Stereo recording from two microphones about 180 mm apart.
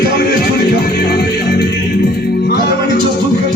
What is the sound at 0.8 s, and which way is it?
Music, 65° left (ahead or behind).